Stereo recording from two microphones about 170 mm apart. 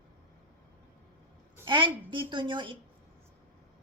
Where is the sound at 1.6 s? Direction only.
30° right (ahead or behind).